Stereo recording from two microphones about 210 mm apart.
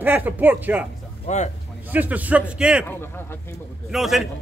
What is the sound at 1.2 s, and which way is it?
Speech, 35° left (ahead or behind).